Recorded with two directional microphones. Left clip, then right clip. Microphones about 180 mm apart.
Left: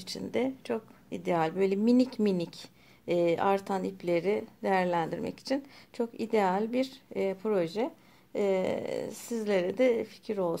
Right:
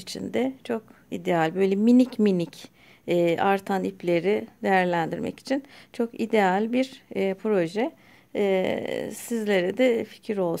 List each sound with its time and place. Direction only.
0.0 s speech: 35° right (ahead or behind)